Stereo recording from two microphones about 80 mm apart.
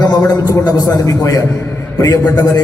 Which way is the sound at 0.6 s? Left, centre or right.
Left.